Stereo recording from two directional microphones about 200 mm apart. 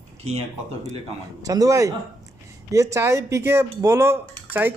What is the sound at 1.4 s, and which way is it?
Speech, 15° right (ahead or behind).